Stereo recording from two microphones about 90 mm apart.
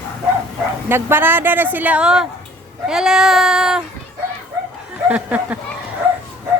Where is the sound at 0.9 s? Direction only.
25° right (ahead or behind); by 2.2 s 10° right (ahead or behind).